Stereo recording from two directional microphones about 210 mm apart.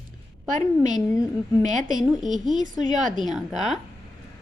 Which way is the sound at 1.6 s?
35° right (ahead or behind).